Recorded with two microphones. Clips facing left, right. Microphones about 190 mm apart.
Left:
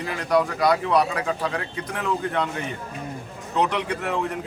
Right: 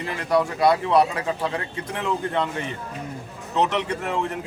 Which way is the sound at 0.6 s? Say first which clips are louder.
Right 2 dB; 25° right (ahead or behind).